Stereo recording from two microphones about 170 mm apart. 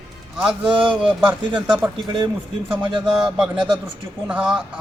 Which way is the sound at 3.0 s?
5° right (ahead or behind).